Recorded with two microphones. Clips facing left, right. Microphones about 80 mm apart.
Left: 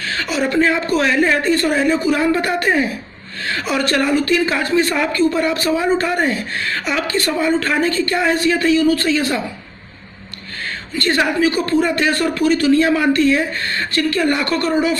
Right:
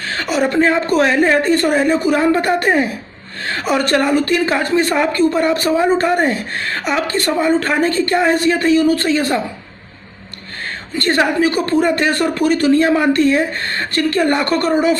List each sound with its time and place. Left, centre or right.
0.0 s a woman's voice: right
1.4 s a woman's voice: right
11.0 s a woman's voice: right